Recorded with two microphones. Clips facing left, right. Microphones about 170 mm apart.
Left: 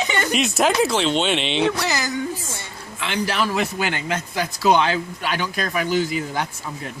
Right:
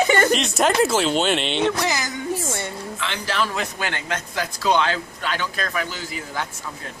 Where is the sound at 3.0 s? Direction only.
15° left (ahead or behind).